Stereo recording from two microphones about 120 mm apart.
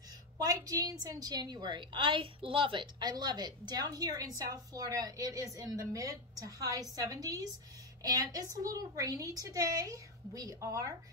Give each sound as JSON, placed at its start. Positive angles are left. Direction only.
{"t": 0.4, "sound": "a woman's voice", "side_deg": -30}